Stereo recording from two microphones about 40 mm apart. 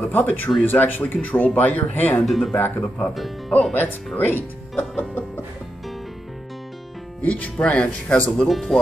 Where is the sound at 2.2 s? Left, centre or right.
Centre.